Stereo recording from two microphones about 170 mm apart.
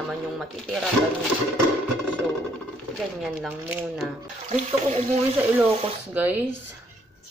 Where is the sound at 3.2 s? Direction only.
10° right (ahead or behind).